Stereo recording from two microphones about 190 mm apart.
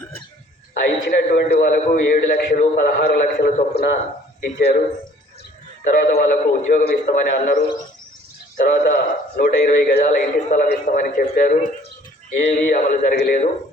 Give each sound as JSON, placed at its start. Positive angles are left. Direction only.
{"t": 0.7, "sound": "a man's voice", "side_deg": 40}
{"t": 5.8, "sound": "a man's voice", "side_deg": 40}